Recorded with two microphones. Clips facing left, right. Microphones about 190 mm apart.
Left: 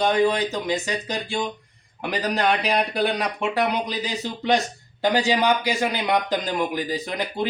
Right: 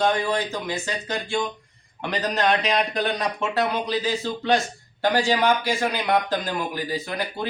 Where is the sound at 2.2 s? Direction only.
10° left (ahead or behind).